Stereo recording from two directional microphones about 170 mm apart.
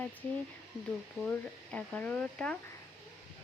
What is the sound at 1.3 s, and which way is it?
Speech, 10° left (ahead or behind).